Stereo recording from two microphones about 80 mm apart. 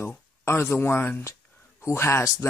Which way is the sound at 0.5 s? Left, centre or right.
Left.